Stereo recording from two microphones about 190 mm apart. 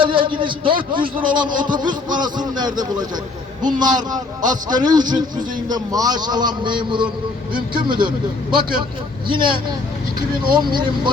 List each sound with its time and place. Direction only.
0.0 s speech: 25° right (ahead or behind)